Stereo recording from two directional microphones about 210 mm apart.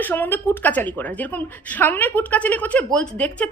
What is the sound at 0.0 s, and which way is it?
A woman's voice, 10° left (ahead or behind).